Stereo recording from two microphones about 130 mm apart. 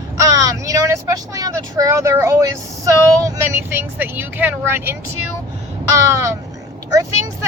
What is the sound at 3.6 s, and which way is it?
Speech, 15° right (ahead or behind).